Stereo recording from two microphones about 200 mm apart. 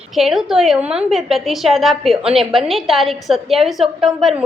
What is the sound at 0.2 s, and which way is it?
A woman's voice, centre (ahead or behind).